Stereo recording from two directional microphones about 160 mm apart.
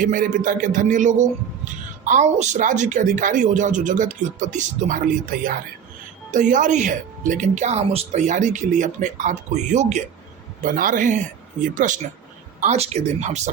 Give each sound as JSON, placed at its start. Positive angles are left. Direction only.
{"t": 0.0, "sound": "a woman's voice", "side_deg": -55}
{"t": 10.6, "sound": "a man's voice", "side_deg": -60}
{"t": 12.5, "sound": "a woman's voice", "side_deg": -45}